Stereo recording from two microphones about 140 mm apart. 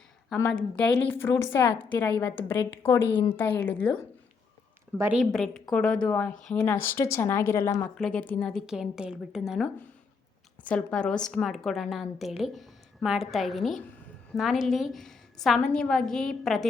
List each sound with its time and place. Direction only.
0.4 s a woman's voice: 5° left (ahead or behind)
5.1 s a woman's voice: centre (ahead or behind); by 7.9 s 20° left (ahead or behind)
7.9 s a woman's voice: 5° left (ahead or behind)
10.7 s a woman's voice: 5° left (ahead or behind)